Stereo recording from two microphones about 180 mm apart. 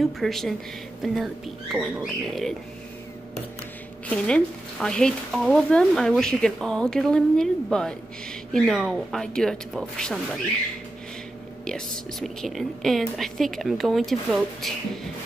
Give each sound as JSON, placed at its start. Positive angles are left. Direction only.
{"t": 0.0, "sound": "speech", "side_deg": 0}
{"t": 4.1, "sound": "speech", "side_deg": 5}
{"t": 11.6, "sound": "speech", "side_deg": 5}